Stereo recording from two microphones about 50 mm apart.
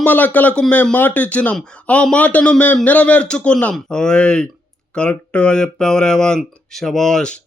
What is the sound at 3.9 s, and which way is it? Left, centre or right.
Speech, centre.